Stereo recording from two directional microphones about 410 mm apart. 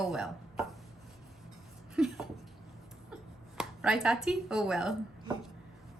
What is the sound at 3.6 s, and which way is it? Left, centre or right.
Speech, centre.